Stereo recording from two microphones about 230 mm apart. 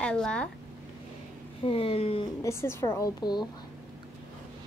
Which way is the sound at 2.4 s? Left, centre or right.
Centre.